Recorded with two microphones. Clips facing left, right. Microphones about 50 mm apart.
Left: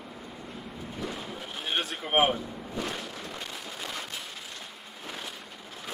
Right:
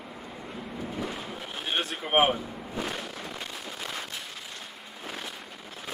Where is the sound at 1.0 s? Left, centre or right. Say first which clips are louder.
Right 1 dB; centre.